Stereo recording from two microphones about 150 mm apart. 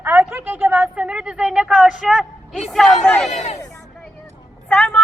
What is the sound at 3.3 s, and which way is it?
Speech, 45° left (ahead or behind).